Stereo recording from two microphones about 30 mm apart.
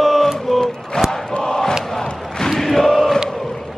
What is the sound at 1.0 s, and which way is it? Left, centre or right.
Crowd, left.